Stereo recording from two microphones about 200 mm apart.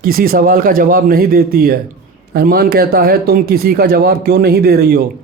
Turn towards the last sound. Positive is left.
turn(degrees=-50)  # may be behind; listen again after turning